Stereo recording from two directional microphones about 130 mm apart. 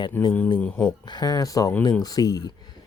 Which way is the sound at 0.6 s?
10° left (ahead or behind).